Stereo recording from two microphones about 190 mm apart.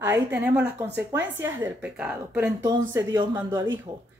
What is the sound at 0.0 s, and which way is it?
A woman's voice, 10° right (ahead or behind).